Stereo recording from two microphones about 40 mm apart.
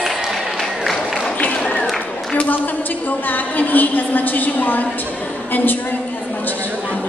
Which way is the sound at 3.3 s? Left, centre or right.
Left.